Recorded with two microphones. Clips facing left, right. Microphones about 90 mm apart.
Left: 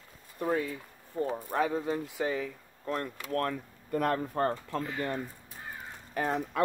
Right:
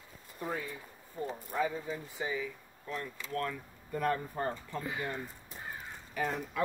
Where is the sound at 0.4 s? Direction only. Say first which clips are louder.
Left 7 dB; 75° left (ahead or behind).